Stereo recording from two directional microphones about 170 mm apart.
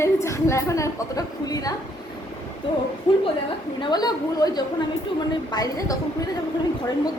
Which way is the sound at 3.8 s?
25° left (ahead or behind).